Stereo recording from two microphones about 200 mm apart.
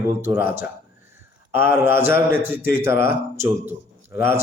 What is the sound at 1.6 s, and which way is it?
Speech, 10° right (ahead or behind).